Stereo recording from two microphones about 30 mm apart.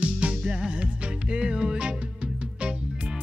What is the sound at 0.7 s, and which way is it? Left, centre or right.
Music, right.